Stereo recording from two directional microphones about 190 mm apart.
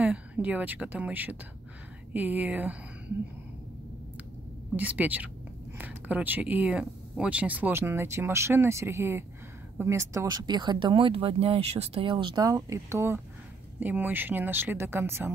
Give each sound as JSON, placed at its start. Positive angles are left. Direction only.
{"t": 0.0, "sound": "speech", "side_deg": -10}
{"t": 4.7, "sound": "speech", "side_deg": -10}